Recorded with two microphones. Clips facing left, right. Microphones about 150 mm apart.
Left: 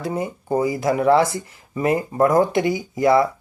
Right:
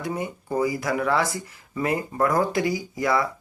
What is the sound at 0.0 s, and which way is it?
Speech, 25° left (ahead or behind).